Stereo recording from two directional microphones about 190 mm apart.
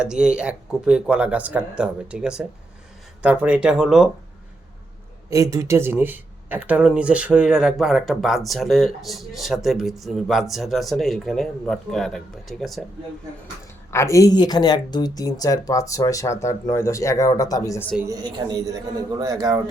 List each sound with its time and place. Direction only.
0.0 s speech: 5° right (ahead or behind)
5.3 s speech: 15° right (ahead or behind); by 12.8 s centre (ahead or behind)
13.9 s speech: 15° left (ahead or behind)
18.1 s speech: 20° right (ahead or behind)